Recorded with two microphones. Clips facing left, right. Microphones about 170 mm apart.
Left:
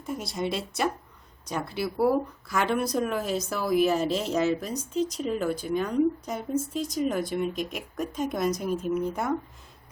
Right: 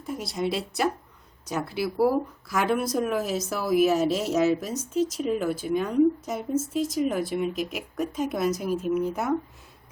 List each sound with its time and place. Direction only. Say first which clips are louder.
0.0 s speech: right 2 dB; centre (ahead or behind)